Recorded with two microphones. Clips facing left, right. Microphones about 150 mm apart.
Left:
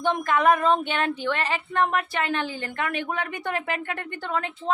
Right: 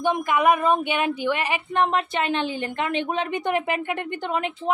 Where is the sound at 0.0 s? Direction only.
10° right (ahead or behind).